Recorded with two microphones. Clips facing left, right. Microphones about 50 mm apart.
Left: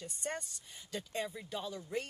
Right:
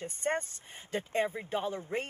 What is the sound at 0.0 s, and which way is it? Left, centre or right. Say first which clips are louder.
Speech: right 8 dB; right.